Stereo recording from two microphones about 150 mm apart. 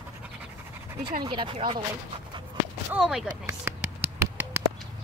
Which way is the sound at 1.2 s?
35° right (ahead or behind).